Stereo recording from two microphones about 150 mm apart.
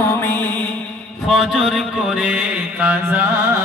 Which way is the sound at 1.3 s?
Centre (ahead or behind).